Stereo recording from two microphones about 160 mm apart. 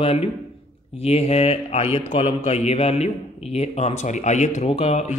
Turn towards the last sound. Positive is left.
turn(degrees=45)  # may be behind; listen again after turning